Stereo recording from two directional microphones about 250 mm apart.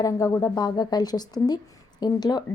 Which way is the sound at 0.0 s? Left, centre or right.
Centre.